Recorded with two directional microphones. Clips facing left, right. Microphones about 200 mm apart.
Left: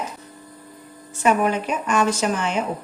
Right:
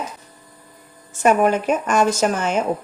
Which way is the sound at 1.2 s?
45° right (ahead or behind).